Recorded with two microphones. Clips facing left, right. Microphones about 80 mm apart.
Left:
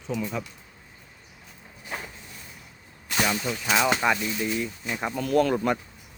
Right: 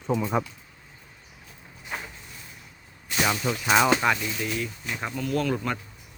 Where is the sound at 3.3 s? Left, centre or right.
Centre.